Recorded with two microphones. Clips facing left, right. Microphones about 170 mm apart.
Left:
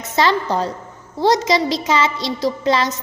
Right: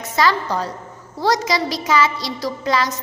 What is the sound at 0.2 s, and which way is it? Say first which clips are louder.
A woman's voice: left 2 dB; 25° left (ahead or behind).